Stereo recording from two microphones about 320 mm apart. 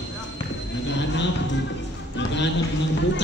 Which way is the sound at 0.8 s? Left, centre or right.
Left.